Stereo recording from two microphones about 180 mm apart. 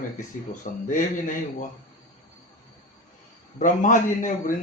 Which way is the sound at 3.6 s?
45° left (ahead or behind).